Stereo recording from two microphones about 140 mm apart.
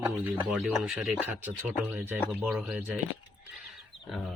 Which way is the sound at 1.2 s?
15° right (ahead or behind).